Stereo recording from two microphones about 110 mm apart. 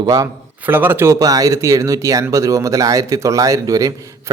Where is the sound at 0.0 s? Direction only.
35° right (ahead or behind).